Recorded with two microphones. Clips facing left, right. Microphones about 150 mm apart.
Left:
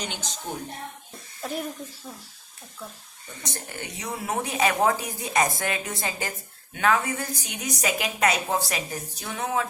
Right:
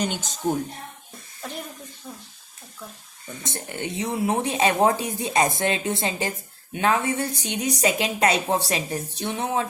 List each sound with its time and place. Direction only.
0.0 s a woman's voice: 50° right (ahead or behind)
2.0 s speech: 10° left (ahead or behind)
3.4 s a woman's voice: 25° right (ahead or behind)